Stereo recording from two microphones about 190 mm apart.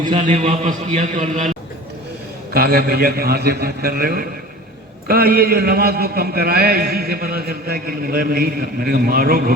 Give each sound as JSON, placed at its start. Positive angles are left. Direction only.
{"t": 0.1, "sound": "a man's voice", "side_deg": -35}
{"t": 2.5, "sound": "a man's voice", "side_deg": -55}